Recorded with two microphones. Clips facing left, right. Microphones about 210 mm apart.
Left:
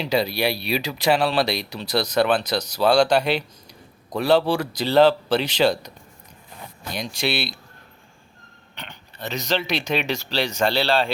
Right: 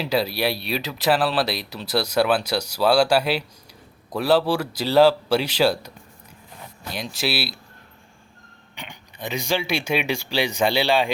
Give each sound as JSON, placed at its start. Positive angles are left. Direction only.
{"t": 0.0, "sound": "speech", "side_deg": -5}
{"t": 8.7, "sound": "speech", "side_deg": -10}